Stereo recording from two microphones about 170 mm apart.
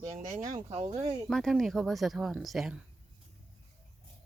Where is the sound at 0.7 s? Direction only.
40° right (ahead or behind).